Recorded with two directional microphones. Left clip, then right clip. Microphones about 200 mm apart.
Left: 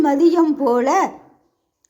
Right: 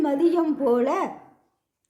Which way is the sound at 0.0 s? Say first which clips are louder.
Left 7 dB; 15° left (ahead or behind).